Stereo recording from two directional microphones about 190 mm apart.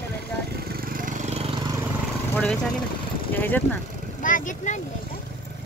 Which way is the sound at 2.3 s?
5° left (ahead or behind).